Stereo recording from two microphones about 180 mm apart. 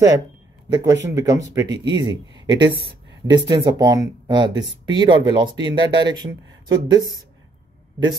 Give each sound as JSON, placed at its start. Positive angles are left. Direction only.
{"t": 0.7, "sound": "speech", "side_deg": -20}